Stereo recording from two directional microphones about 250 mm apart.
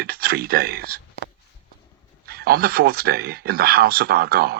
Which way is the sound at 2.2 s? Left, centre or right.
Right.